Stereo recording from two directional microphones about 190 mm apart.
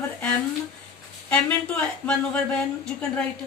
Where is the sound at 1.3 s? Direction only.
5° left (ahead or behind).